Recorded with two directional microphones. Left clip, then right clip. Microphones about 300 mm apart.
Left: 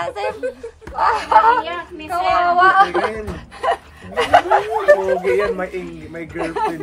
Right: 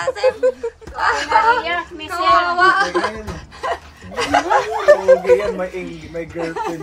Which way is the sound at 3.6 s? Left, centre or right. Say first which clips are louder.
Left 4 dB; left.